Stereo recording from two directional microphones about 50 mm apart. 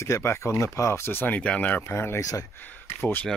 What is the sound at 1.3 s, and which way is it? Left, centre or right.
Speech, left.